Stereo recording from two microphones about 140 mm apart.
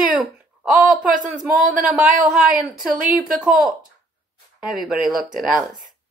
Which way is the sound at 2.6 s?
75° right (ahead or behind).